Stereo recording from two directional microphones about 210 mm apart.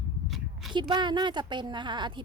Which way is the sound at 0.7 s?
20° right (ahead or behind).